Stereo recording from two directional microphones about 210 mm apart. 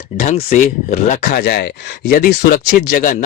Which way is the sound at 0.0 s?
35° left (ahead or behind).